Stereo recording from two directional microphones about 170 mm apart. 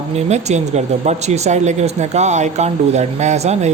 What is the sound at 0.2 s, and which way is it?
Speech, 40° right (ahead or behind).